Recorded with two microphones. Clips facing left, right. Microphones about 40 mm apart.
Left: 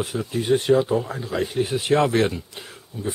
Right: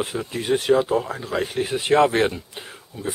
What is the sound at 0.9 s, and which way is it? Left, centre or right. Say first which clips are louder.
Speech: right 1 dB; centre.